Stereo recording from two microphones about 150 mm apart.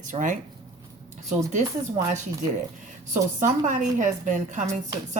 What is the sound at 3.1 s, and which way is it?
Speech, 55° right (ahead or behind).